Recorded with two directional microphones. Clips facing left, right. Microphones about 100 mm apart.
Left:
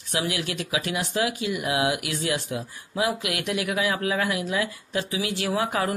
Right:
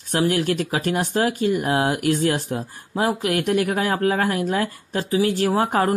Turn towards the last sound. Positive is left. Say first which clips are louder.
# right 6 dB
turn(degrees=-45)  # may be behind; listen again after turning